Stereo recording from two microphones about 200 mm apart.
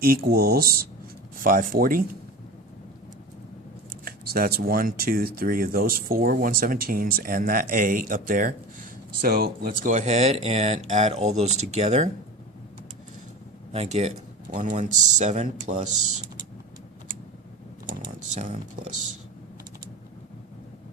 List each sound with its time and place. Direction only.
0.0 s speech: 50° right (ahead or behind)
4.0 s speech: 45° right (ahead or behind)
13.7 s speech: 35° right (ahead or behind)
18.3 s speech: 40° right (ahead or behind)